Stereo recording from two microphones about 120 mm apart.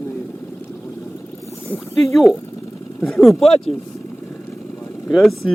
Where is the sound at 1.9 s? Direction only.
Centre (ahead or behind).